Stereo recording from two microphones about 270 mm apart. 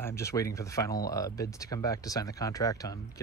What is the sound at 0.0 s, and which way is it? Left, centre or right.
Speech, centre.